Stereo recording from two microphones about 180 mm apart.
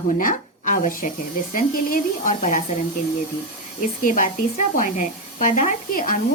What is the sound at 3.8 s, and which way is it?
A woman's voice, 50° left (ahead or behind).